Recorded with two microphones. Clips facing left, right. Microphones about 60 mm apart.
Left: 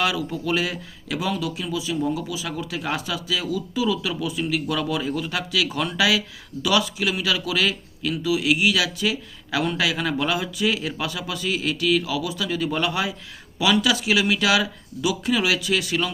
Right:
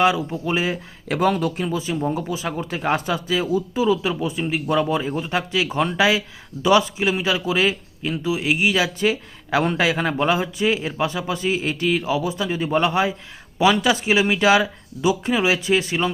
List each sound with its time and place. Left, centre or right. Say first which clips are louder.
0.0 s speech: right 5 dB; right
1.0 s a man's voice: right 6 dB; right